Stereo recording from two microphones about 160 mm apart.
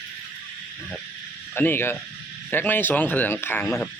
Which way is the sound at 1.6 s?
15° left (ahead or behind).